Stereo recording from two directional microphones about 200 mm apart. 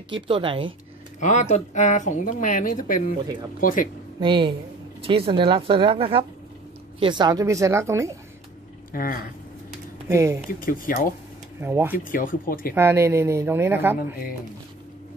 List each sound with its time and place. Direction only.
0.1 s speech: 25° right (ahead or behind)
1.2 s speech: 35° left (ahead or behind)
4.2 s speech: 25° right (ahead or behind)
8.9 s speech: 45° left (ahead or behind)
10.0 s speech: 15° right (ahead or behind)
10.6 s speech: 45° left (ahead or behind)
11.6 s speech: 10° right (ahead or behind)
11.9 s speech: 45° left (ahead or behind)
12.7 s speech: 10° right (ahead or behind)